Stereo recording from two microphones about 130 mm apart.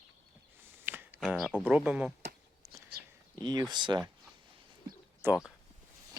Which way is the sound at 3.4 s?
35° right (ahead or behind).